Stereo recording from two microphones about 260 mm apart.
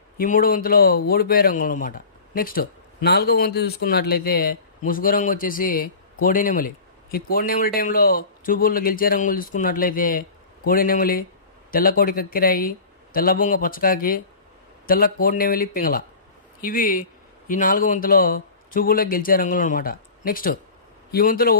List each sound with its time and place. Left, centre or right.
0.2 s speech: left